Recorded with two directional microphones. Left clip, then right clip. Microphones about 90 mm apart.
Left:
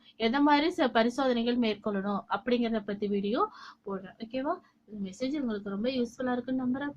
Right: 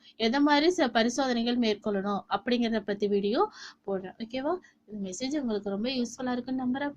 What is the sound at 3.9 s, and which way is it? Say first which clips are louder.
A woman's voice: right 2 dB; 40° right (ahead or behind).